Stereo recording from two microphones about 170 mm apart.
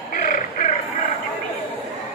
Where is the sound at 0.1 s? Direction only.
50° left (ahead or behind).